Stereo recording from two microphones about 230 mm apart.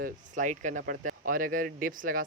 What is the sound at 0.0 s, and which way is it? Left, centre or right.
Speech, right.